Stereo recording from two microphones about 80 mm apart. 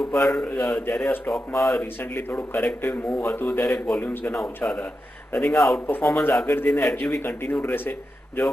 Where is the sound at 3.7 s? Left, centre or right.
Centre.